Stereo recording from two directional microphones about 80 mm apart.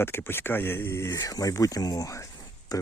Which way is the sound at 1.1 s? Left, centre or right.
Left.